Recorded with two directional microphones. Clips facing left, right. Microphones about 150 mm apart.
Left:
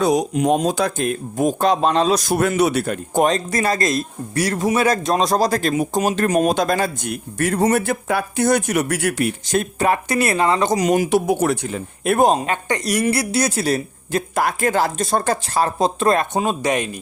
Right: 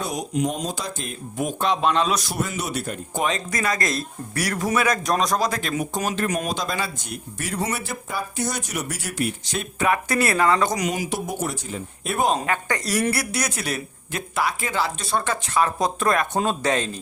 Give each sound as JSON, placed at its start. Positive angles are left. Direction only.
{"t": 0.0, "sound": "speech", "side_deg": 80}
{"t": 1.4, "sound": "speech", "side_deg": 40}
{"t": 2.3, "sound": "speech", "side_deg": 65}
{"t": 3.2, "sound": "speech", "side_deg": 35}
{"t": 5.7, "sound": "speech", "side_deg": 25}
{"t": 6.5, "sound": "speech", "side_deg": 50}
{"t": 8.0, "sound": "speech", "side_deg": 65}
{"t": 9.6, "sound": "speech", "side_deg": 35}
{"t": 10.1, "sound": "speech", "side_deg": 20}
{"t": 10.8, "sound": "speech", "side_deg": 55}
{"t": 12.5, "sound": "speech", "side_deg": 20}
{"t": 16.4, "sound": "speech", "side_deg": 15}